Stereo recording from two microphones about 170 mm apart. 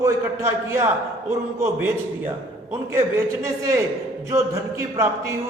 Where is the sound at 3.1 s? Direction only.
15° right (ahead or behind).